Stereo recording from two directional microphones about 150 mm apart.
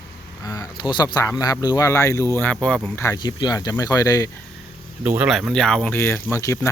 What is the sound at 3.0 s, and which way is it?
Speech, 25° left (ahead or behind).